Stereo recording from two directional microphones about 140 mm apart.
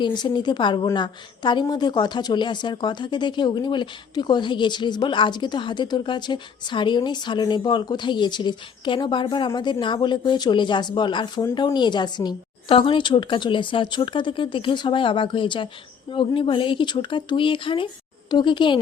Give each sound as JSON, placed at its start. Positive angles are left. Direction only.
{"t": 0.0, "sound": "speech", "side_deg": 30}